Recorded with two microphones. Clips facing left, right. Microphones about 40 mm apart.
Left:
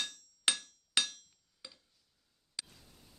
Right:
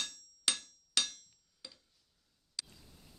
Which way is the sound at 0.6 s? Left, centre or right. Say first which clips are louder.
Left 2 dB; left.